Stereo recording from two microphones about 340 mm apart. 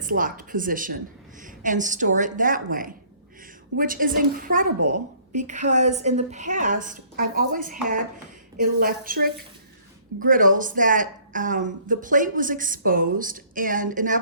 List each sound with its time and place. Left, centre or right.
0.0 s speech: right
4.8 s a woman's voice: right
5.4 s speech: right